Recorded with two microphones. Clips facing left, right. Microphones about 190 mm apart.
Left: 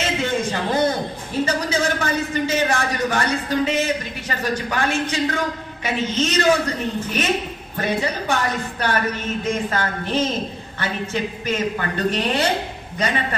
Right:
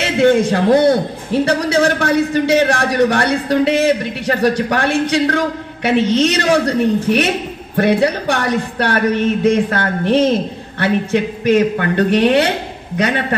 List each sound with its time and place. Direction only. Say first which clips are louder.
0.0 s a man's voice: right 10 dB; 65° right (ahead or behind)